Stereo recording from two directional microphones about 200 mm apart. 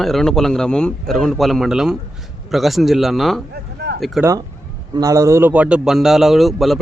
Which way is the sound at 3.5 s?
55° right (ahead or behind).